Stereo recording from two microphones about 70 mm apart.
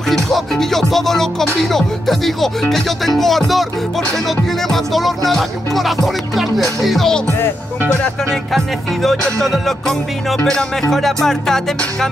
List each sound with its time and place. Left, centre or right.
0.1 s music: centre
4.6 s music: centre
7.2 s speech: left
8.5 s music: centre